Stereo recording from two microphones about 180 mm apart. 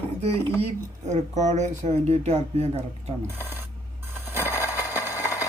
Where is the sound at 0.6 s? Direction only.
35° right (ahead or behind).